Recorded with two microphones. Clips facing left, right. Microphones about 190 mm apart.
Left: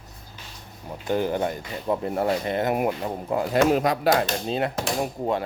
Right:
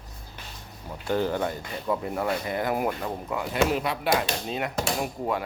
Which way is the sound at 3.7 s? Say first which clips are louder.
Left 5 dB; 40° left (ahead or behind).